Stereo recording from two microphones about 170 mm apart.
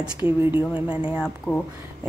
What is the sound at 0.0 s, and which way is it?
Speech, 15° right (ahead or behind).